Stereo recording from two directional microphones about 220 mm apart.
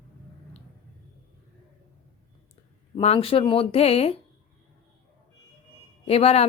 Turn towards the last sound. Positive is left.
turn(degrees=25)  # may be behind; listen again after turning